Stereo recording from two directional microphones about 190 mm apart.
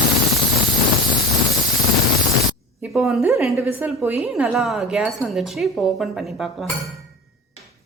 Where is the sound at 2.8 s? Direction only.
Centre (ahead or behind).